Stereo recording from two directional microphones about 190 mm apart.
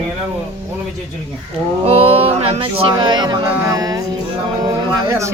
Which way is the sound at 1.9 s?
30° right (ahead or behind).